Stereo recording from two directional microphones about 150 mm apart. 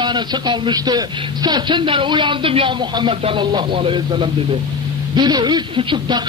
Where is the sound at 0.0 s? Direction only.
30° right (ahead or behind).